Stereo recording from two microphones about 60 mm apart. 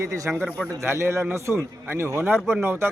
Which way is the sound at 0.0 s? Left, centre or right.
Right.